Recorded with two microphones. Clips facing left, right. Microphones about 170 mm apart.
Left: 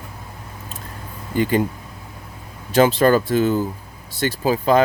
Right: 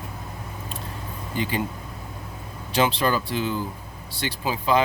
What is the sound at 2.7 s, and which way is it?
Speech, 45° left (ahead or behind).